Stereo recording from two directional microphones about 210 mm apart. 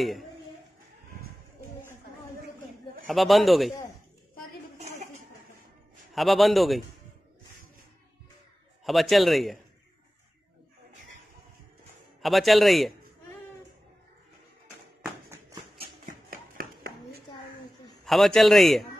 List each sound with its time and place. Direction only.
3.1 s a man's voice: centre (ahead or behind)
6.1 s a man's voice: centre (ahead or behind)
8.8 s a man's voice: centre (ahead or behind)
12.2 s a man's voice: centre (ahead or behind)
15.8 s a sound: 45° right (ahead or behind)
18.0 s a man's voice: centre (ahead or behind)